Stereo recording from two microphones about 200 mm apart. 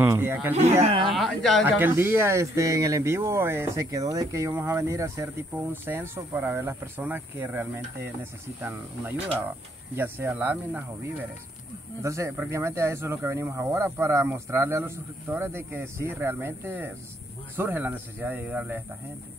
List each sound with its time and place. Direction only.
0.0 s speech: 10° right (ahead or behind)
0.6 s speech: 30° right (ahead or behind)
1.0 s speech: centre (ahead or behind)
1.9 s speech: 10° right (ahead or behind)
12.0 s speech: 15° right (ahead or behind)